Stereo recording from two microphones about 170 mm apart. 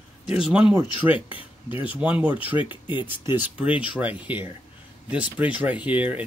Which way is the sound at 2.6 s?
30° left (ahead or behind).